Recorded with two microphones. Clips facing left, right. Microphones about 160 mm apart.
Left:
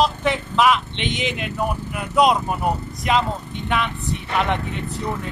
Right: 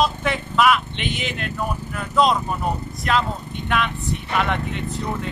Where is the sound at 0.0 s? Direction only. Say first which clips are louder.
Left 2 dB; 15° left (ahead or behind).